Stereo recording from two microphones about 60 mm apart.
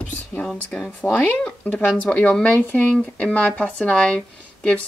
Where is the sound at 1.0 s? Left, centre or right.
Centre.